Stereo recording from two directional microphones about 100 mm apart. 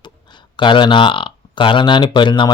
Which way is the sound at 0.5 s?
50° left (ahead or behind).